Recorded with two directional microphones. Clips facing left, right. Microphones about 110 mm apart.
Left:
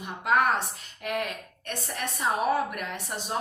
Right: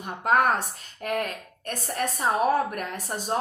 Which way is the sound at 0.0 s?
45° right (ahead or behind).